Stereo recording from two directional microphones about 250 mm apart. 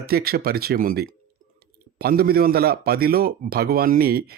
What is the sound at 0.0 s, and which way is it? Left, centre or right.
Speech, right.